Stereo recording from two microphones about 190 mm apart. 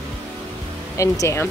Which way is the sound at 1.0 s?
15° left (ahead or behind).